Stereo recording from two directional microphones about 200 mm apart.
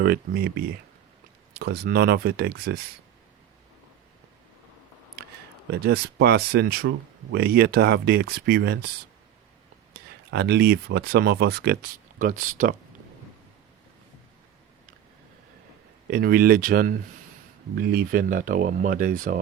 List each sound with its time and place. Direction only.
0.0 s speech: 50° right (ahead or behind)
5.7 s speech: 50° right (ahead or behind)
10.3 s speech: 55° right (ahead or behind)
16.0 s speech: 50° right (ahead or behind)